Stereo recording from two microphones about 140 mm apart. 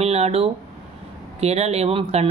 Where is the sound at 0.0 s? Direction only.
45° right (ahead or behind).